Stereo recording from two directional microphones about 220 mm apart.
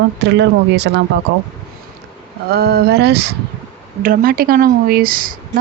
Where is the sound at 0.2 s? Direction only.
50° right (ahead or behind).